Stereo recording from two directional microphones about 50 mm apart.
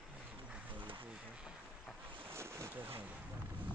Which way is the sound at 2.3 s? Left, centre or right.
Right.